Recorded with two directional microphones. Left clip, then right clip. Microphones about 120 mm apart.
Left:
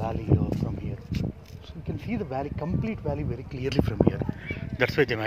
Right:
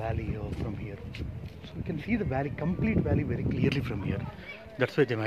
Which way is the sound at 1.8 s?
Centre (ahead or behind).